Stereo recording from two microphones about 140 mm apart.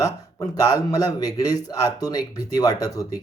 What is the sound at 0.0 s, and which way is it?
Speech, 25° left (ahead or behind).